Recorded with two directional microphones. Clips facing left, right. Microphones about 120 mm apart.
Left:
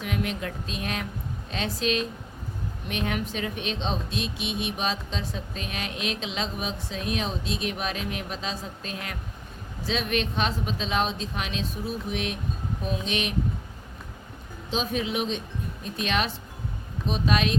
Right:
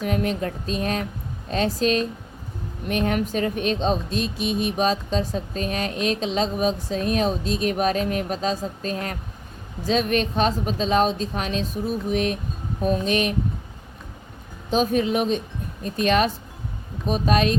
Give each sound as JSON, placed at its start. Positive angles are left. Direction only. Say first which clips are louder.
{"t": 0.0, "sound": "speech", "louder": "right 6 dB", "side_deg": -40}
{"t": 14.7, "sound": "speech", "louder": "right 7 dB", "side_deg": -45}